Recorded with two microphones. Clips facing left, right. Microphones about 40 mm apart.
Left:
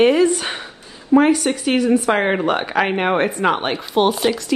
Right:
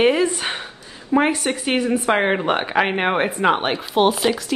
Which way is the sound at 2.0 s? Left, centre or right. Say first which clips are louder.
Left 1 dB; centre.